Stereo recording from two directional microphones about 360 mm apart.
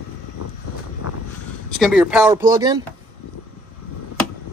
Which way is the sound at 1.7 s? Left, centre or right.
Centre.